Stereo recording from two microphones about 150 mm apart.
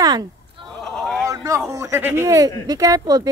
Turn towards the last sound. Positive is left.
turn(degrees=-25)  # may be behind; listen again after turning